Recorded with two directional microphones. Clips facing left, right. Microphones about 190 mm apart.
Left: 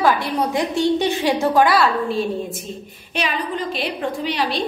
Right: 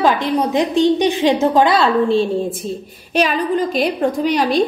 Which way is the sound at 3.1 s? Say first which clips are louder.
Right 7 dB; 45° right (ahead or behind).